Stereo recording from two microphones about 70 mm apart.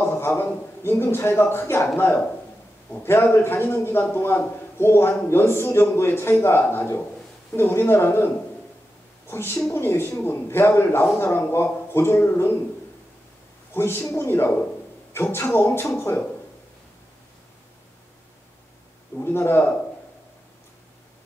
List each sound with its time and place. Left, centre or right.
0.0 s a man's voice: left
9.3 s a man's voice: left
13.7 s a man's voice: left
19.1 s speech: left